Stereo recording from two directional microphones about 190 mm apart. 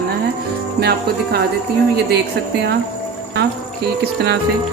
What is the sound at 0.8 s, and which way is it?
Speech, 55° right (ahead or behind).